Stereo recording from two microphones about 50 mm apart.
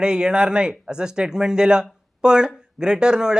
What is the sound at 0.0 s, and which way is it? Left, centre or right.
Speech, centre.